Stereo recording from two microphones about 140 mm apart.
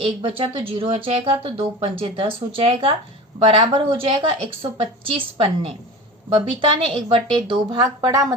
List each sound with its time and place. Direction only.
0.0 s speech: 40° right (ahead or behind); by 8.3 s 25° right (ahead or behind)